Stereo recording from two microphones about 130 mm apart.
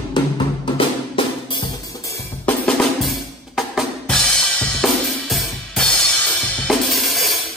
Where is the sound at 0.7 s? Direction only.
40° left (ahead or behind).